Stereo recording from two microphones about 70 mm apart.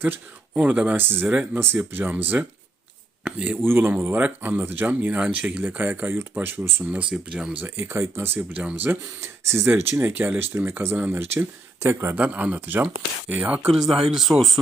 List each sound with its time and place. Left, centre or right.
0.5 s speech: centre
0.9 s speech: right
3.6 s speech: right
6.8 s speech: centre
7.1 s speech: centre
7.8 s speech: right
8.4 s speech: centre
8.7 s speech: right
9.2 s speech: right
12.1 s speech: right
13.7 s speech: centre